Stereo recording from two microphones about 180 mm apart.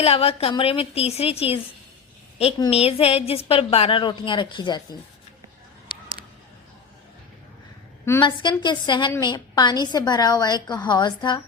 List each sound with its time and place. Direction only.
0.0 s a woman's voice: 35° left (ahead or behind)
8.2 s a woman's voice: 25° left (ahead or behind)